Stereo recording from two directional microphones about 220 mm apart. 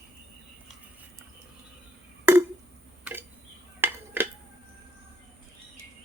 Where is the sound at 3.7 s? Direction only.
10° right (ahead or behind).